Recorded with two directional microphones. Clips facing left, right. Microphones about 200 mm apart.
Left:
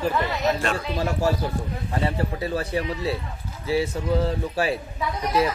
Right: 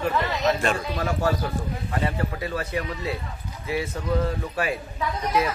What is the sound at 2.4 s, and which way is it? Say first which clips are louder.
Speech: left 3 dB; 30° left (ahead or behind).